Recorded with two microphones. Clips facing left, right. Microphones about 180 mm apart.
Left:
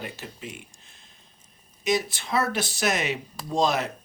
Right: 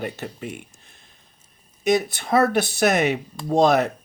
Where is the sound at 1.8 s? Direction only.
60° right (ahead or behind).